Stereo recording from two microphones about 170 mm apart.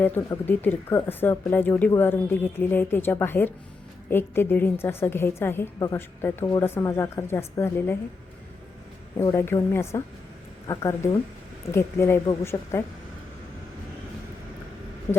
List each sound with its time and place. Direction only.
0.0 s a woman's voice: 10° left (ahead or behind)
9.1 s a woman's voice: 15° left (ahead or behind)